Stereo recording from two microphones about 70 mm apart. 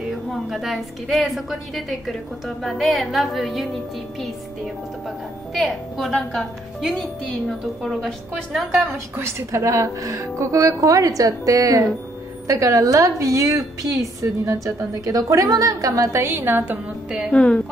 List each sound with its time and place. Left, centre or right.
0.1 s a woman's voice: centre
5.0 s a woman's voice: centre
9.1 s a woman's voice: right
16.2 s a woman's voice: right
17.3 s a woman's voice: centre